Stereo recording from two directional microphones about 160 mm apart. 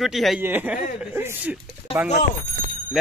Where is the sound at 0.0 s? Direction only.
Centre (ahead or behind).